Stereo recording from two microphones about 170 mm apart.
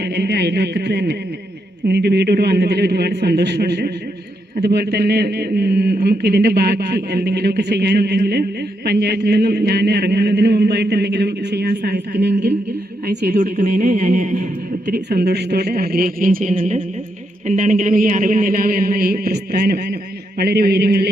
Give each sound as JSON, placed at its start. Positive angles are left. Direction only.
{"t": 0.0, "sound": "a sound", "side_deg": -75}
{"t": 1.9, "sound": "a man's voice", "side_deg": -75}
{"t": 13.1, "sound": "speech", "side_deg": -55}
{"t": 14.9, "sound": "a man's voice", "side_deg": -65}